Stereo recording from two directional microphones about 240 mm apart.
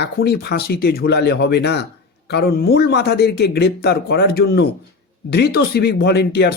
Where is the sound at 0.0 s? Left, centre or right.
Left.